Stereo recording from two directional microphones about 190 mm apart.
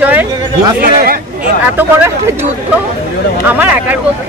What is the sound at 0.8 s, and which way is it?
Speech, 50° right (ahead or behind).